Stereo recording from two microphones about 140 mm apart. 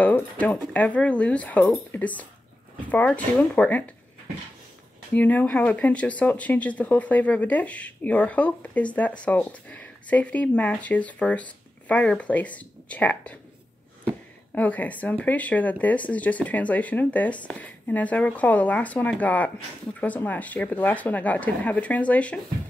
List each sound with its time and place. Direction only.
0.0 s speech: 10° left (ahead or behind)
5.1 s speech: 10° left (ahead or behind)
14.5 s speech: 10° left (ahead or behind)